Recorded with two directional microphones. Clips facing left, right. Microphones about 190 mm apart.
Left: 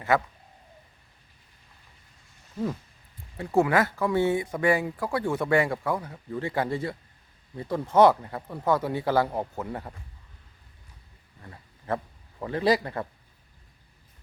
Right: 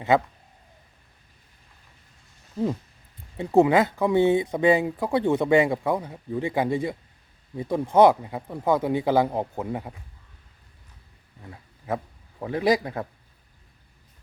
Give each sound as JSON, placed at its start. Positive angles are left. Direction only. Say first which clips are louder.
{"t": 3.3, "sound": "speech", "louder": "right 4 dB", "side_deg": -20}
{"t": 11.4, "sound": "a sound", "louder": "right 1 dB", "side_deg": -5}
{"t": 12.4, "sound": "speech", "louder": "right 2 dB", "side_deg": -10}